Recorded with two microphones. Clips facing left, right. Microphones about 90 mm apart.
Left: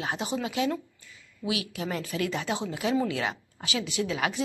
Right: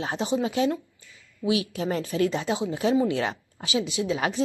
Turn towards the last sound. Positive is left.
turn(degrees=-30)  # may be behind; listen again after turning